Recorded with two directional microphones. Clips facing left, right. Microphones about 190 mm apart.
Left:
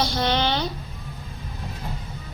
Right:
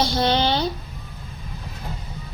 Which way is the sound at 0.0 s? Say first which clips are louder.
Right 3 dB; 30° right (ahead or behind).